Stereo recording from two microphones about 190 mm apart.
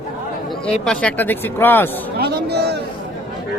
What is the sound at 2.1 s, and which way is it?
Speech, 55° right (ahead or behind).